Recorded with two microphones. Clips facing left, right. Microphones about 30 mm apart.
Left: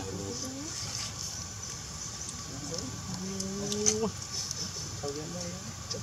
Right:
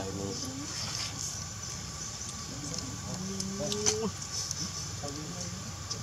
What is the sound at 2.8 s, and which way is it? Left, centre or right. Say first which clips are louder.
Speech: even; centre.